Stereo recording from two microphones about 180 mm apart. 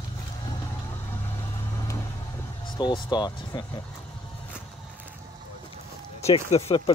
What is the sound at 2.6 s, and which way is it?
Speech, 25° left (ahead or behind).